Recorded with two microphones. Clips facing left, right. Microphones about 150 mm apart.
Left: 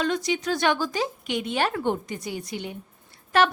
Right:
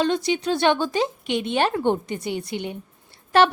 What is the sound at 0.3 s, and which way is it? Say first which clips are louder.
Speech: right 4 dB; 30° right (ahead or behind).